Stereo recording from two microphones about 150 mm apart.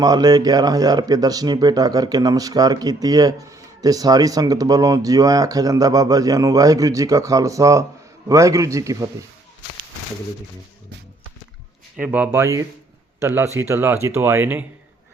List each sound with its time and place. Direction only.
0.0 s speech: 25° right (ahead or behind)
11.9 s speech: 10° right (ahead or behind)